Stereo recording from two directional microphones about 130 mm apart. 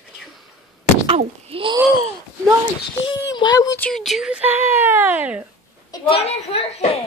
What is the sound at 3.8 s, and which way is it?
A child's voice, 5° left (ahead or behind).